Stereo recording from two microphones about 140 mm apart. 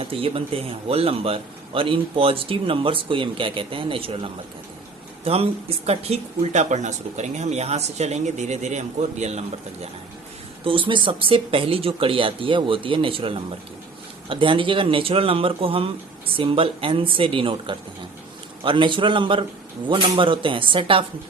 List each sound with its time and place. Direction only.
0.0 s speech: 40° right (ahead or behind)
10.6 s speech: 40° right (ahead or behind)